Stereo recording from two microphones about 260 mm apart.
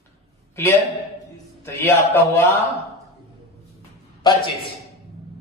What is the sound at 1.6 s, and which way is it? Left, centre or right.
Speech, centre.